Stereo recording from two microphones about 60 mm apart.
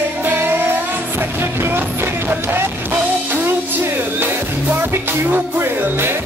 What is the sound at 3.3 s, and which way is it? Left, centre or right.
Music, right.